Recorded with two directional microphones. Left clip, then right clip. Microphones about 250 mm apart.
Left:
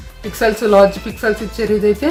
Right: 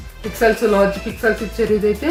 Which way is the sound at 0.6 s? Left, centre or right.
Left.